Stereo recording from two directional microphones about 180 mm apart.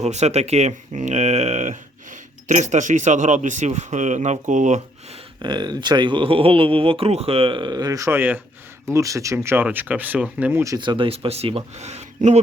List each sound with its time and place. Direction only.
0.0 s speech: 40° right (ahead or behind)
5.4 s speech: 25° right (ahead or behind)